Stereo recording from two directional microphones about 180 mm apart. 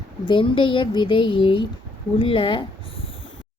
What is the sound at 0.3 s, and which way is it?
A woman's voice, 30° left (ahead or behind).